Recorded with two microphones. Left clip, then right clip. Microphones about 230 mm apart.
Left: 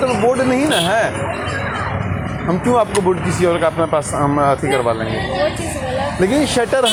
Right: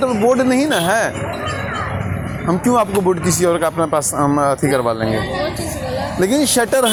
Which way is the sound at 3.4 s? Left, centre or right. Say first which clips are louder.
Left 2 dB; right.